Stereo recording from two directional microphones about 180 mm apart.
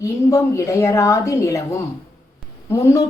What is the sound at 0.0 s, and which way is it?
A woman's voice, 15° left (ahead or behind).